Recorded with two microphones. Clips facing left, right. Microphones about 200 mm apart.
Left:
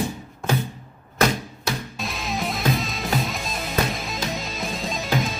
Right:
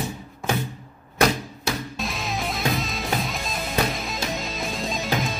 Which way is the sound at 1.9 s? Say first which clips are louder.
Even; centre (ahead or behind).